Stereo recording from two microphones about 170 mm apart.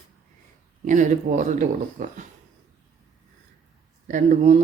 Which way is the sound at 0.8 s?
50° right (ahead or behind).